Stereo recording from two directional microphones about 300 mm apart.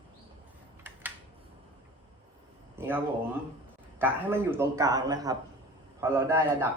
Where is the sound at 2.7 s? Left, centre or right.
Centre.